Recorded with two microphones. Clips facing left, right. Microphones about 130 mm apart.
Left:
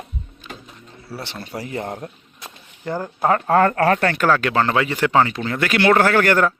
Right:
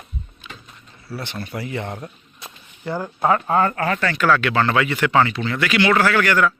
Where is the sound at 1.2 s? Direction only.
35° left (ahead or behind).